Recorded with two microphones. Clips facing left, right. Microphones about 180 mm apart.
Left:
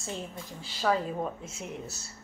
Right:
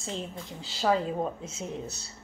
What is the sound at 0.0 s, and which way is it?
A woman's voice, 20° right (ahead or behind).